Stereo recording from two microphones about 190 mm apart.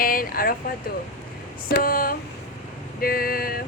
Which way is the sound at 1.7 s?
50° left (ahead or behind).